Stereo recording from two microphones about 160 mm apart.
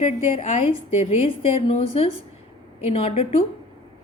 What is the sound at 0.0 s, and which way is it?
A woman's voice, 35° left (ahead or behind).